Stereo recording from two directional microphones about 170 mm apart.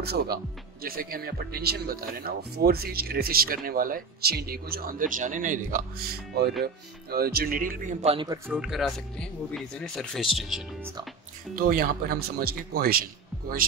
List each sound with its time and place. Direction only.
0.0 s speech: 70° right (ahead or behind)
0.8 s speech: 60° right (ahead or behind)
6.6 s speech: 65° right (ahead or behind); by 8.3 s 35° right (ahead or behind)
8.5 s speech: 5° right (ahead or behind)
11.5 s speech: 60° right (ahead or behind)